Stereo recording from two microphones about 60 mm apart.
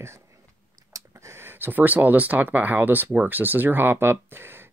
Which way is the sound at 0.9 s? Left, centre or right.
Right.